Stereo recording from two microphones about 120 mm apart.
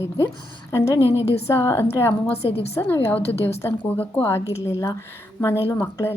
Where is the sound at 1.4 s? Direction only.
20° left (ahead or behind).